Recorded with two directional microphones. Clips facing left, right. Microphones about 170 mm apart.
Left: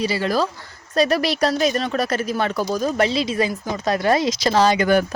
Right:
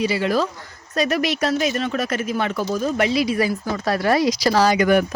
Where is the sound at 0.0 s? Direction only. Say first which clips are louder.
Right 1 dB; 35° left (ahead or behind).